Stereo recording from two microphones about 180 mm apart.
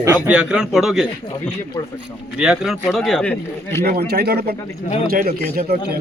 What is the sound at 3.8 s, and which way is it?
A man's voice, 60° right (ahead or behind).